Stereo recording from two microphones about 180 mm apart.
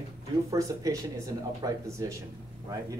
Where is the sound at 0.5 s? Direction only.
20° right (ahead or behind).